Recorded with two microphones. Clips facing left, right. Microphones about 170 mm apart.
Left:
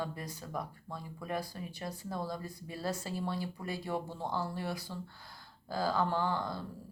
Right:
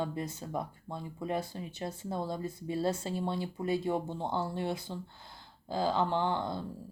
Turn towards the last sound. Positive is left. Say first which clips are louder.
# right 2 dB
turn(degrees=-25)  # may be behind; listen again after turning